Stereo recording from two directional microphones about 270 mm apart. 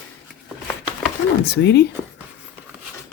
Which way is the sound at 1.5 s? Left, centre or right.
Left.